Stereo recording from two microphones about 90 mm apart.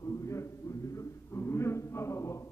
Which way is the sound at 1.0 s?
30° left (ahead or behind).